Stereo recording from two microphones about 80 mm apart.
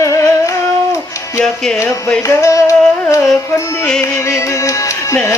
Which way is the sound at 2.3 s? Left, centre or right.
Left.